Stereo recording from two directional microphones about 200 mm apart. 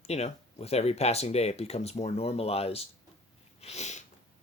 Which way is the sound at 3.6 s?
35° left (ahead or behind).